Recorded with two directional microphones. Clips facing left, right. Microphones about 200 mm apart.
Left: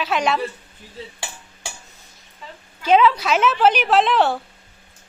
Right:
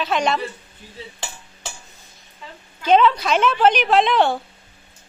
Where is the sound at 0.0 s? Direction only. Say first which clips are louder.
Even; 5° left (ahead or behind).